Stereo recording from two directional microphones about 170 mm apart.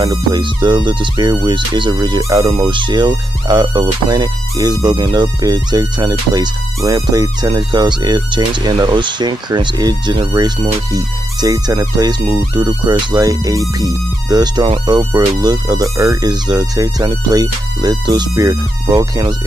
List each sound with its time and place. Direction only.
0.0 s speech: 20° right (ahead or behind)